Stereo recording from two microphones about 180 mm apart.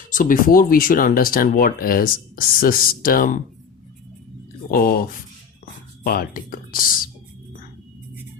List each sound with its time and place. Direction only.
0.1 s speech: 50° left (ahead or behind)
4.7 s speech: 55° left (ahead or behind)
6.1 s speech: 55° left (ahead or behind)